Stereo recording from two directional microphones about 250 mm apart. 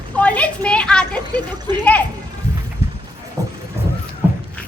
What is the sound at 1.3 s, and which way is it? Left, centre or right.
Speech, centre.